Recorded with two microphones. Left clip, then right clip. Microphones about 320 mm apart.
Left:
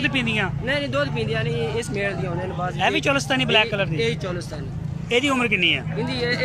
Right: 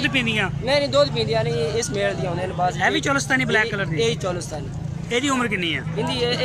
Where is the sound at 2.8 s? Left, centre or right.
Centre.